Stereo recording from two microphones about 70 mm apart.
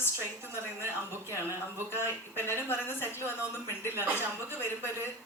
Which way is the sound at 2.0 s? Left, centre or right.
Left.